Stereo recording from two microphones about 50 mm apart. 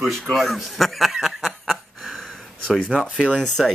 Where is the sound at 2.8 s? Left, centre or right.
Centre.